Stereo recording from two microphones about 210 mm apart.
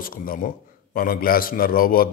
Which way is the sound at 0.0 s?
45° left (ahead or behind).